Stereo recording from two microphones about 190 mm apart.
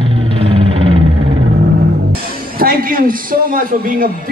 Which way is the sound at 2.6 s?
50° right (ahead or behind).